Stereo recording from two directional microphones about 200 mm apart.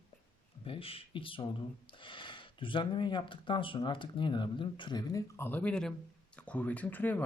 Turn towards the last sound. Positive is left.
turn(degrees=10)  # may be behind; listen again after turning